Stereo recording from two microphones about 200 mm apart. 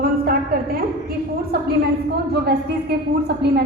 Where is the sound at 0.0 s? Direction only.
45° right (ahead or behind).